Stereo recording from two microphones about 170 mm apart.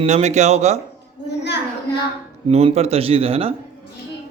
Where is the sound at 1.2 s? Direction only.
90° left.